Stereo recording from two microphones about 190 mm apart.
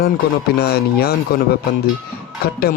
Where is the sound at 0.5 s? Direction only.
55° left (ahead or behind).